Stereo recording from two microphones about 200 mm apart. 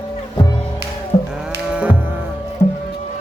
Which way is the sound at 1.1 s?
35° left (ahead or behind).